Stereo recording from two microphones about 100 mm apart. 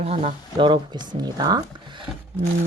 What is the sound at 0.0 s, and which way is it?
Speech, 90° right.